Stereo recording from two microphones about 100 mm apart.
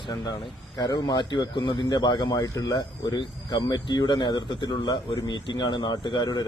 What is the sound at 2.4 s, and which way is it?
Speech, 40° left (ahead or behind).